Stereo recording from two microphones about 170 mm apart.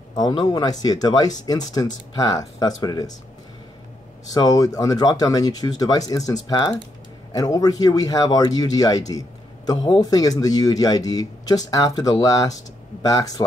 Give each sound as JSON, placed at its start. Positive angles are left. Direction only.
{"t": 0.1, "sound": "speech", "side_deg": 25}
{"t": 4.3, "sound": "speech", "side_deg": 20}